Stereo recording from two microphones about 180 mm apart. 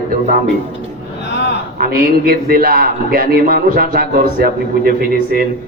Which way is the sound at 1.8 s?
55° right (ahead or behind).